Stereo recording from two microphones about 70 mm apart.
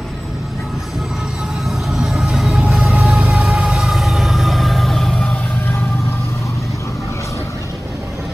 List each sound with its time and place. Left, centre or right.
1.7 s train: centre
3.0 s music: centre